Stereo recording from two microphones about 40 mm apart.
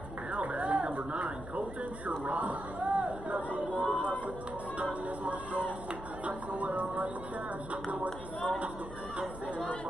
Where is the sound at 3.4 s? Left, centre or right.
Right.